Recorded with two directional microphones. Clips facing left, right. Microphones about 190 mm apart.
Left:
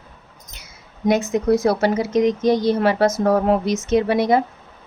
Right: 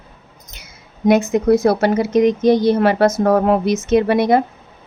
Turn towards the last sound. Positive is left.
turn(degrees=-60)  # may be behind; listen again after turning